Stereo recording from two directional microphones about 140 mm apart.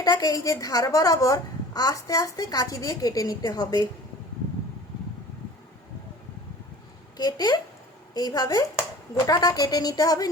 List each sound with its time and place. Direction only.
0.0 s a woman's voice: 30° left (ahead or behind)
7.2 s a woman's voice: 30° left (ahead or behind)